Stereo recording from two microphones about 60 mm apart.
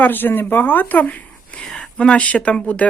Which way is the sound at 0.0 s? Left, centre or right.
Left.